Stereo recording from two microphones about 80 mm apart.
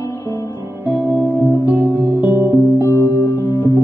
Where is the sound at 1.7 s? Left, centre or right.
Right.